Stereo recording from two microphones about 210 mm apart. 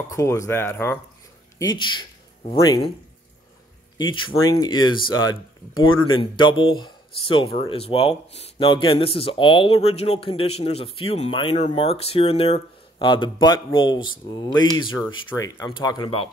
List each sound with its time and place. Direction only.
0.1 s speech: 15° left (ahead or behind)
4.1 s speech: 20° left (ahead or behind)
5.9 s speech: 75° left (ahead or behind)
6.3 s speech: 20° left (ahead or behind)